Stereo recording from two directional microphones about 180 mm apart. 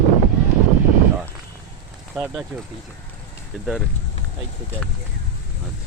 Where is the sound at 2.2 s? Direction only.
10° right (ahead or behind).